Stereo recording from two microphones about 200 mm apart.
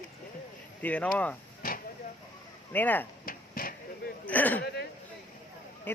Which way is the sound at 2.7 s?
10° left (ahead or behind).